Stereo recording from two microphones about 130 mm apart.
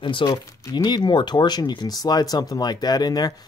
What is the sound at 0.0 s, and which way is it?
Speech, 35° left (ahead or behind).